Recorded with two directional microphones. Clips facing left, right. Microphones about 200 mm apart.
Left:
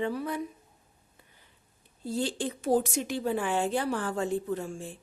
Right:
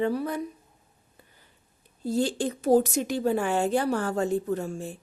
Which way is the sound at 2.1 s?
40° right (ahead or behind).